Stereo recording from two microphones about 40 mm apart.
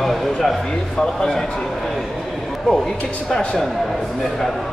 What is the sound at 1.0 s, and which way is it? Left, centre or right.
Speech, centre.